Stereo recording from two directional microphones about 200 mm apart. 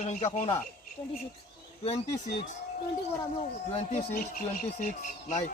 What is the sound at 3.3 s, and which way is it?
Speech, 30° left (ahead or behind).